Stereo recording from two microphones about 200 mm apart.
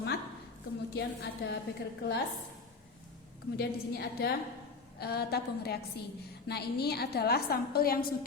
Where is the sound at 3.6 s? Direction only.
50° left (ahead or behind).